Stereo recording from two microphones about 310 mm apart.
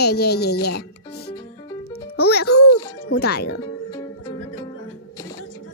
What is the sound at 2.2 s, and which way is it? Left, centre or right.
A child's voice, left.